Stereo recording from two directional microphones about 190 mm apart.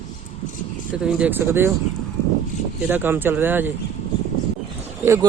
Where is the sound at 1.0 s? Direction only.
10° right (ahead or behind).